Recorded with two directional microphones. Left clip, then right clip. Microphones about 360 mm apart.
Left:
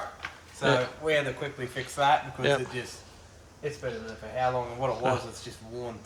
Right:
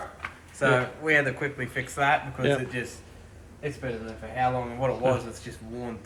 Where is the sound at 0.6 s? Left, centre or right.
Centre.